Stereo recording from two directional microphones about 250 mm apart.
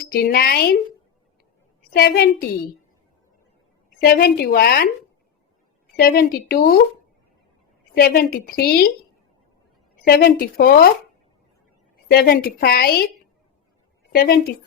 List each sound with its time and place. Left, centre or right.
0.0 s a woman's voice: left
1.9 s a woman's voice: left
4.0 s a woman's voice: left
6.0 s a woman's voice: left
7.9 s a woman's voice: left
10.1 s a woman's voice: left
12.1 s a woman's voice: left
14.1 s a woman's voice: left